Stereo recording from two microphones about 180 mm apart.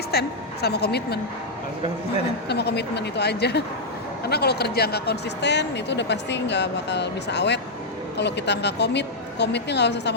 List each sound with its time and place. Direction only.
0.1 s a woman's voice: 65° left (ahead or behind)
2.5 s speech: 65° left (ahead or behind)